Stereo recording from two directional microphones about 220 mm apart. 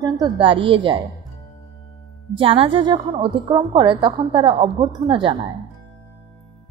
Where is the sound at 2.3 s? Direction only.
25° right (ahead or behind).